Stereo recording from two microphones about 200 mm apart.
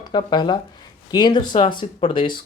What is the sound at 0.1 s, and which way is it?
Speech, 25° left (ahead or behind).